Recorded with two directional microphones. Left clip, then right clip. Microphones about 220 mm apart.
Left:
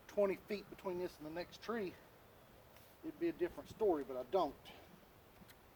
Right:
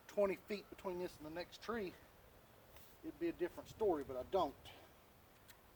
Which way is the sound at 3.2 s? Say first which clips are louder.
Left 2 dB; 15° right (ahead or behind).